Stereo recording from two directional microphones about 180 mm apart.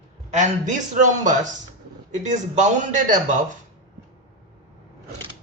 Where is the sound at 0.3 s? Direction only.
45° right (ahead or behind).